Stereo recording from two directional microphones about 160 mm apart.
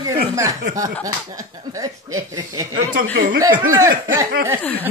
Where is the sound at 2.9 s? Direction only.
70° right (ahead or behind).